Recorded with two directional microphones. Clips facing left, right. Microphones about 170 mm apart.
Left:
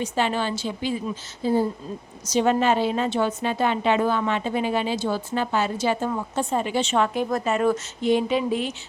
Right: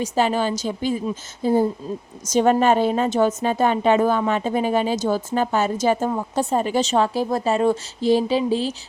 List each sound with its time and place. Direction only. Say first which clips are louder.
0.0 s a woman's voice: right 4 dB; 40° right (ahead or behind)